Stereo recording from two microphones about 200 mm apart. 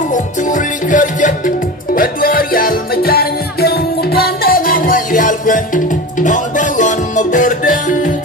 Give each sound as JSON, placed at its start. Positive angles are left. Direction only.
{"t": 0.1, "sound": "music", "side_deg": 40}